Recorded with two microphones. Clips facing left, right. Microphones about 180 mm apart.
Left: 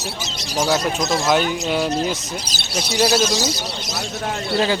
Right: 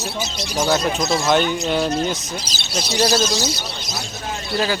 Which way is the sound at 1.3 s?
5° left (ahead or behind).